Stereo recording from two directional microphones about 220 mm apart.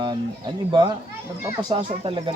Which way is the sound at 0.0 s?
20° right (ahead or behind).